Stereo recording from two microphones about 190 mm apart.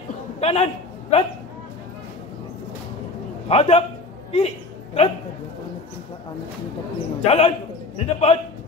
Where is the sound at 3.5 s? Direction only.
35° left (ahead or behind).